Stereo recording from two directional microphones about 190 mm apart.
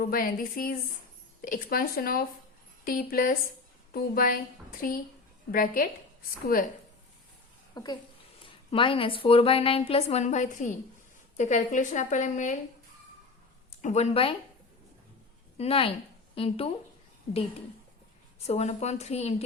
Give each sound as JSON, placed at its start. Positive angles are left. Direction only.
{"t": 0.0, "sound": "a woman's voice", "side_deg": 50}
{"t": 7.8, "sound": "a woman's voice", "side_deg": 25}
{"t": 13.8, "sound": "speech", "side_deg": 35}
{"t": 15.5, "sound": "speech", "side_deg": 30}
{"t": 18.4, "sound": "speech", "side_deg": 35}